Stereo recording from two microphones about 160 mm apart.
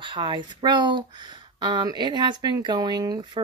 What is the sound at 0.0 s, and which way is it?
Speech, 30° right (ahead or behind).